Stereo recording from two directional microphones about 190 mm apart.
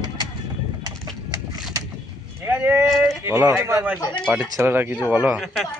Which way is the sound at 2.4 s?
10° right (ahead or behind).